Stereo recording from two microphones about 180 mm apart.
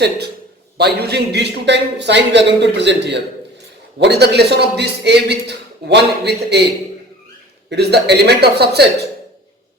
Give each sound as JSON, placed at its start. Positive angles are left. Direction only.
{"t": 0.8, "sound": "a man's voice", "side_deg": -65}
{"t": 7.7, "sound": "speech", "side_deg": -65}